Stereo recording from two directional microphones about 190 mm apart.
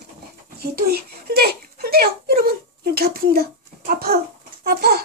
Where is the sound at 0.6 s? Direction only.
55° right (ahead or behind).